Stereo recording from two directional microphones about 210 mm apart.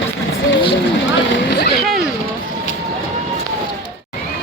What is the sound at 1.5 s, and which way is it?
Speech, 50° left (ahead or behind).